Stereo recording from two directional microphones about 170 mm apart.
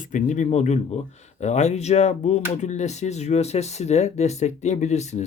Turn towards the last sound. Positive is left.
turn(degrees=40)  # may be behind; listen again after turning